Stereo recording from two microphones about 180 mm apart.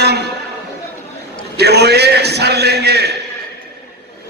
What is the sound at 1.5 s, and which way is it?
A man's voice, 65° right (ahead or behind).